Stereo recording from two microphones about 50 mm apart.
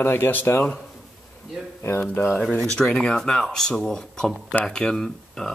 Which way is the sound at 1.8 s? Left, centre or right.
Left.